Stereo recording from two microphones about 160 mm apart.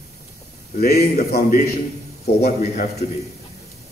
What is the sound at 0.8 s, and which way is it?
A man's voice, 80° left.